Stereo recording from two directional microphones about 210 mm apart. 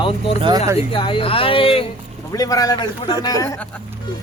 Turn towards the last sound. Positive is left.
turn(degrees=20)  # may be behind; listen again after turning